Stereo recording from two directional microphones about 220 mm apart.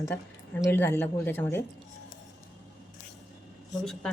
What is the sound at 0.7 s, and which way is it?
Speech, 10° left (ahead or behind).